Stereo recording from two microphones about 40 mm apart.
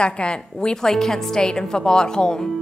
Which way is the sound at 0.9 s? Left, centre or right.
Centre.